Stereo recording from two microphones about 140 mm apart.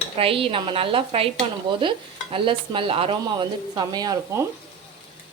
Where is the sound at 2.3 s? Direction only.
40° right (ahead or behind).